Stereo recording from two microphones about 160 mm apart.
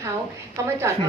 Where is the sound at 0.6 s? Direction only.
15° right (ahead or behind).